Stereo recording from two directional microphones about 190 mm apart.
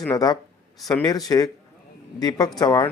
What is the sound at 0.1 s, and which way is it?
Speech, 20° left (ahead or behind).